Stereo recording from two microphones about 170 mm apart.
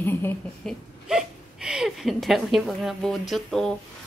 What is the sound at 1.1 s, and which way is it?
A woman's voice, 5° right (ahead or behind).